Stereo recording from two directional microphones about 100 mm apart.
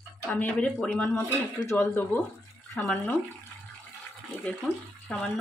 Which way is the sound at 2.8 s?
15° left (ahead or behind).